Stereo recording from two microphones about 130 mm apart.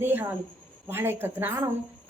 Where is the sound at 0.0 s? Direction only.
15° right (ahead or behind).